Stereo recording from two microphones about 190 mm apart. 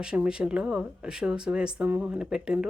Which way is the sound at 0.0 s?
5° right (ahead or behind).